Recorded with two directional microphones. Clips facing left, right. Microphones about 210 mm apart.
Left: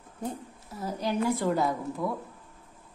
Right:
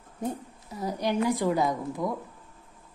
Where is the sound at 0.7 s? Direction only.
15° right (ahead or behind).